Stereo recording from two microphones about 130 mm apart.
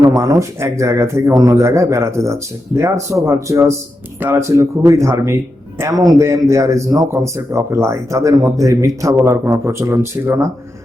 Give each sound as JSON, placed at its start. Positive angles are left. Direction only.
{"t": 0.0, "sound": "a man's voice", "side_deg": -25}